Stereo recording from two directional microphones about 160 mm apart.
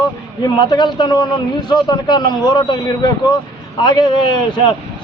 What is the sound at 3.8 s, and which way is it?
Speech, 30° left (ahead or behind).